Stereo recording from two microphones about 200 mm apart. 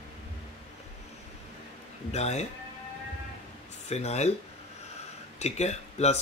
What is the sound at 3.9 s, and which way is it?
Speech, 35° left (ahead or behind).